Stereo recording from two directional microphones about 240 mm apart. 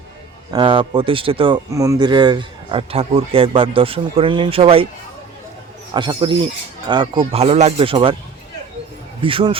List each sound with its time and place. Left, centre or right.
0.5 s speech: right
5.9 s speech: right
9.2 s speech: right